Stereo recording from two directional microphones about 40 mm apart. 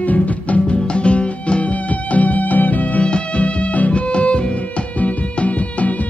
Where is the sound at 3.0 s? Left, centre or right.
Left.